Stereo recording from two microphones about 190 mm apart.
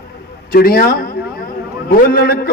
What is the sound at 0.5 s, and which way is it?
A man's voice, 50° left (ahead or behind).